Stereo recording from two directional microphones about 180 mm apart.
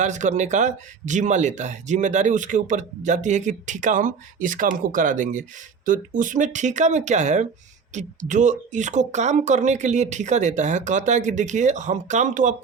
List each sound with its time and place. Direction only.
0.0 s speech: 40° right (ahead or behind)